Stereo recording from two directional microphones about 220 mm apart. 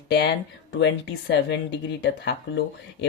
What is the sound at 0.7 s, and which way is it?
Speech, 55° left (ahead or behind).